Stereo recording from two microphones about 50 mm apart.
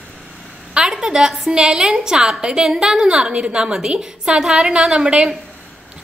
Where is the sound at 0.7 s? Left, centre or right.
Centre.